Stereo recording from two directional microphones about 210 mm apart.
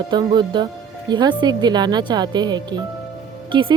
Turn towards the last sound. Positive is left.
turn(degrees=-25)  # may be behind; listen again after turning